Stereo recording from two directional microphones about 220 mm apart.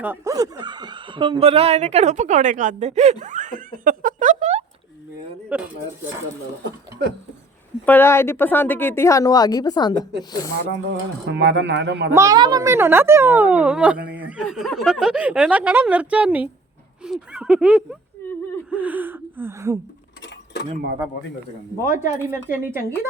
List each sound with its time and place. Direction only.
0.0 s speech: 10° right (ahead or behind); by 4.6 s 30° right (ahead or behind)
5.5 s a woman's voice: 5° right (ahead or behind)
7.9 s a woman's voice: 10° left (ahead or behind)
10.7 s speech: 55° right (ahead or behind)
12.1 s a woman's voice: 15° right (ahead or behind)
20.2 s mechanisms: 50° left (ahead or behind)
21.8 s speech: 35° left (ahead or behind)
22.1 s speech: 10° right (ahead or behind)